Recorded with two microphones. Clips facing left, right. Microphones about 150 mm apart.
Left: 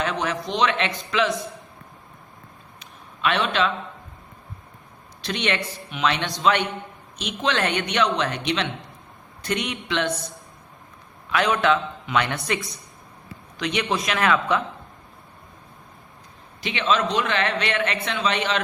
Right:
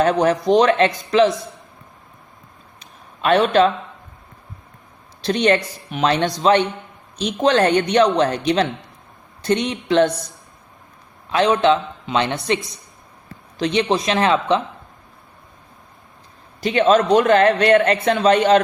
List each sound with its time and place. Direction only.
0.0 s speech: 40° right (ahead or behind)
3.2 s speech: 40° right (ahead or behind)
5.2 s speech: 40° right (ahead or behind)
11.3 s a man's voice: 30° right (ahead or behind)
16.6 s a man's voice: 40° right (ahead or behind)